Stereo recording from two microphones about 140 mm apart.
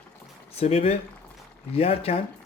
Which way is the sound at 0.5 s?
45° left (ahead or behind).